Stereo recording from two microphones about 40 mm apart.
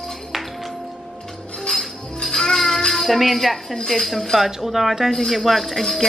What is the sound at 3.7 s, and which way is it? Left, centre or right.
Speech, centre.